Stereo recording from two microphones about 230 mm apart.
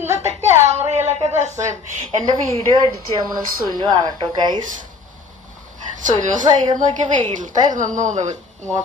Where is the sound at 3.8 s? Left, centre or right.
Centre.